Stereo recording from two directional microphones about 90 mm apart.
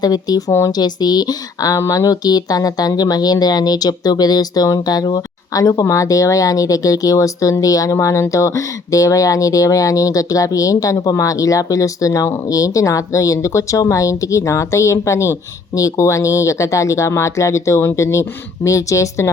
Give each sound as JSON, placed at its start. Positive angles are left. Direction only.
{"t": 0.0, "sound": "speech", "side_deg": 45}